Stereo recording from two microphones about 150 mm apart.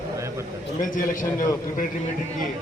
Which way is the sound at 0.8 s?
65° left (ahead or behind).